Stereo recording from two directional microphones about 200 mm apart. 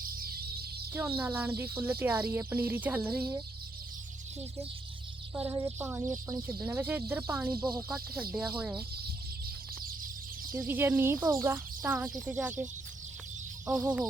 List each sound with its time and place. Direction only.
0.0 s music: 50° right (ahead or behind)
0.9 s speech: 10° right (ahead or behind)
5.3 s speech: 10° right (ahead or behind)
10.5 s speech: 10° right (ahead or behind)
13.7 s speech: 5° right (ahead or behind)